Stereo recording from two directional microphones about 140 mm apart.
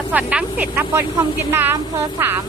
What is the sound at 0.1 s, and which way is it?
A woman's voice, 10° right (ahead or behind).